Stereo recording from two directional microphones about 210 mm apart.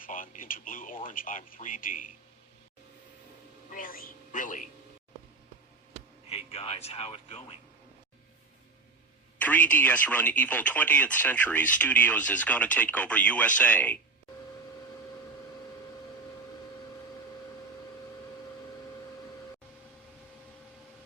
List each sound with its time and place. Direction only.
0.0 s speech: 40° left (ahead or behind)
3.7 s a man's voice: 40° left (ahead or behind)
6.2 s speech: 30° left (ahead or behind)
9.4 s speech: 5° left (ahead or behind)